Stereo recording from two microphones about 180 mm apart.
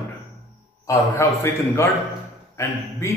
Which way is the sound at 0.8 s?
15° left (ahead or behind).